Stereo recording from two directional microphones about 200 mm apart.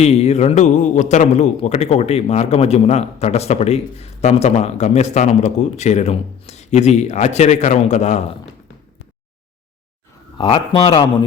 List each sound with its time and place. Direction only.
0.0 s a man's voice: 35° left (ahead or behind)
10.3 s speech: 25° left (ahead or behind)